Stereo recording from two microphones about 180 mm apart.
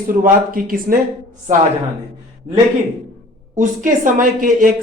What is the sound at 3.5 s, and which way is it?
Speech, 45° right (ahead or behind).